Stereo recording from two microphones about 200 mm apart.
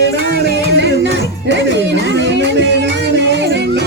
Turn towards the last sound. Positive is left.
turn(degrees=-60)  # may be behind; listen again after turning